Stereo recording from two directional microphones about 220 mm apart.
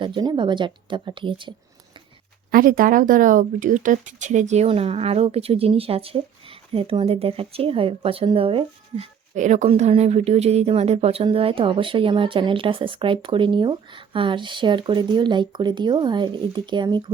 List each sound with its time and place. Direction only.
0.0 s speech: 20° right (ahead or behind)
2.5 s speech: 40° right (ahead or behind); by 17.1 s 20° right (ahead or behind)